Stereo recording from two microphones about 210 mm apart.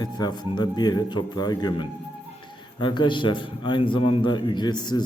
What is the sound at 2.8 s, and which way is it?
Speech, 20° left (ahead or behind).